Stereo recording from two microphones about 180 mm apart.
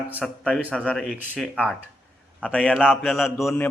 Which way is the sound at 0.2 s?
5° left (ahead or behind).